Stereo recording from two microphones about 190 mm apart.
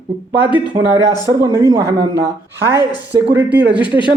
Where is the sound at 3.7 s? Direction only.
25° left (ahead or behind).